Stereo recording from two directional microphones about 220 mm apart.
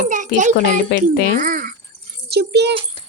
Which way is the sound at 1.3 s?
35° right (ahead or behind).